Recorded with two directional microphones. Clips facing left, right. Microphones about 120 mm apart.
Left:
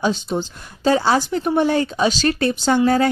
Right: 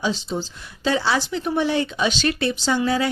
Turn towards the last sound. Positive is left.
turn(degrees=50)  # may be behind; listen again after turning